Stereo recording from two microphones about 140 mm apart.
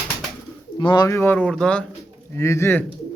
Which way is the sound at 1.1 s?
15° left (ahead or behind).